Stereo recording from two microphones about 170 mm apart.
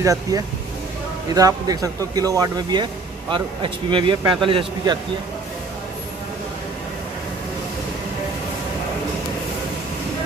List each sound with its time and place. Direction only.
0.0 s speech: 20° right (ahead or behind)